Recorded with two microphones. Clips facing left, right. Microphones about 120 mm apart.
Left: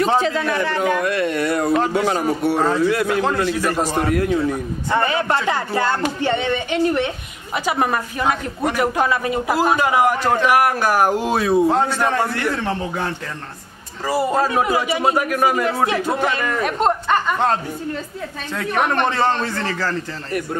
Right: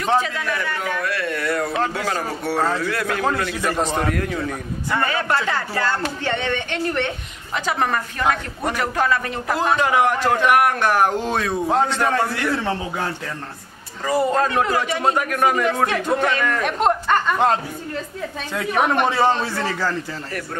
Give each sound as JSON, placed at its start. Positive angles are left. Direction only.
{"t": 0.2, "sound": "a man's voice", "side_deg": 30}
{"t": 12.5, "sound": "speech", "side_deg": -5}
{"t": 14.0, "sound": "speech", "side_deg": 5}
{"t": 18.6, "sound": "a man's voice", "side_deg": -5}